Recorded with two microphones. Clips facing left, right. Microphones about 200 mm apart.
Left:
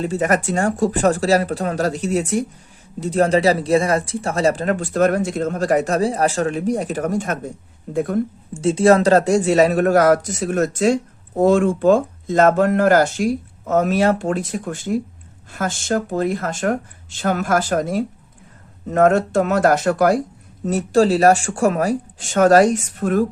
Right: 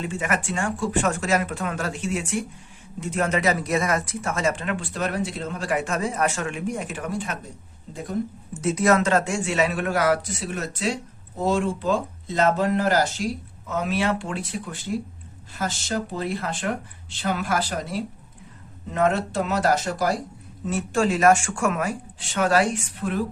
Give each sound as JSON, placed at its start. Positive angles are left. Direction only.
{"t": 0.0, "sound": "speech", "side_deg": 40}
{"t": 7.9, "sound": "speech", "side_deg": 55}
{"t": 8.5, "sound": "a man's voice", "side_deg": 30}
{"t": 20.7, "sound": "speech", "side_deg": 40}